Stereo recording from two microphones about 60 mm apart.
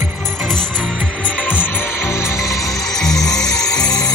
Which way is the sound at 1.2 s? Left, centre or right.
Left.